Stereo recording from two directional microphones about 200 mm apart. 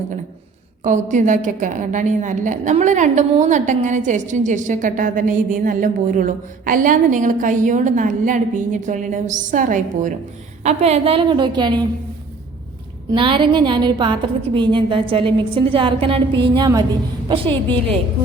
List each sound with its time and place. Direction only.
0.9 s a woman's voice: 35° right (ahead or behind); by 11.9 s 20° right (ahead or behind)
13.1 s a woman's voice: 25° right (ahead or behind)